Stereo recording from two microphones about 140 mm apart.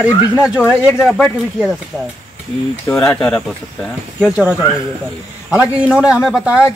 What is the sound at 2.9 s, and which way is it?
Speech, 5° left (ahead or behind).